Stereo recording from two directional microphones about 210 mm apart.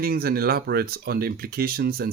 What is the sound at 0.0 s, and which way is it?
Speech, 45° right (ahead or behind).